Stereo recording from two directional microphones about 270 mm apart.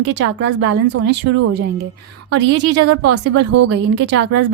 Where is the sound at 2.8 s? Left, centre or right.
Right.